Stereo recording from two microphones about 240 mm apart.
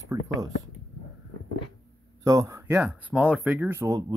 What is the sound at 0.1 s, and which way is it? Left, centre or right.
Speech, centre.